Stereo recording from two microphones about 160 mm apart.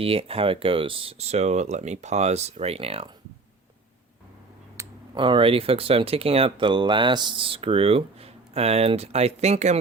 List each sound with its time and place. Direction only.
0.0 s speech: 35° right (ahead or behind)
4.8 s a sound: 20° right (ahead or behind)
5.1 s speech: 30° right (ahead or behind)